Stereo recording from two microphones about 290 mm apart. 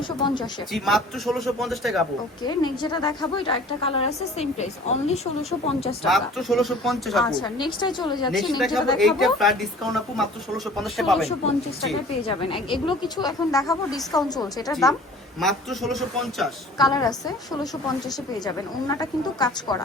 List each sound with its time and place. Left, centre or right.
0.2 s a woman's voice: centre
0.7 s a man's voice: centre
2.4 s a woman's voice: centre
6.1 s a man's voice: centre
7.4 s a woman's voice: centre
8.3 s a man's voice: centre
12.3 s a woman's voice: centre
15.4 s a man's voice: centre
16.7 s a woman's voice: centre